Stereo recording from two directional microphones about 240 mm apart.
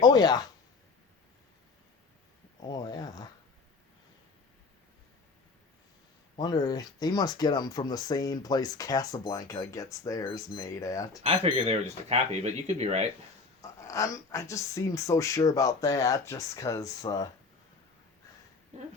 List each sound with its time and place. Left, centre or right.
0.0 s speech: centre
2.6 s speech: centre
6.3 s speech: centre
11.2 s speech: right
13.6 s speech: centre
18.7 s speech: right